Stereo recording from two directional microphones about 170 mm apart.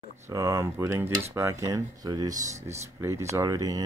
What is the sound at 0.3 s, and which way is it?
Speech, 20° right (ahead or behind).